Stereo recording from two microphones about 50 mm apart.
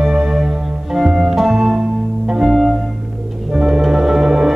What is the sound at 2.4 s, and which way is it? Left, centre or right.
Music, centre.